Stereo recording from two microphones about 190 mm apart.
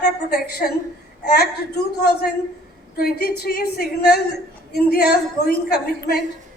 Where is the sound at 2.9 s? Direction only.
55° left (ahead or behind).